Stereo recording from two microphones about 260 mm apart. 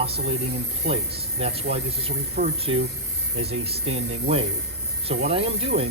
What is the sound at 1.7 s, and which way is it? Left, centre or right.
Speech, right.